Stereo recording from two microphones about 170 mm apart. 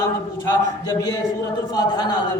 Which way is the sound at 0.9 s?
20° left (ahead or behind).